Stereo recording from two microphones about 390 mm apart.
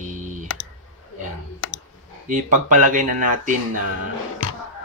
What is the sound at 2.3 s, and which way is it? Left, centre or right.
Speech, centre.